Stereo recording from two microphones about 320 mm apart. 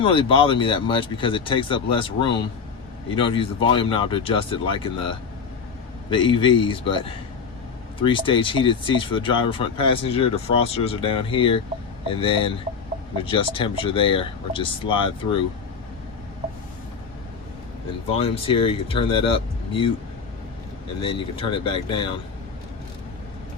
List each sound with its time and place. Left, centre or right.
0.0 s speech: centre
18.1 s speech: centre
21.0 s speech: centre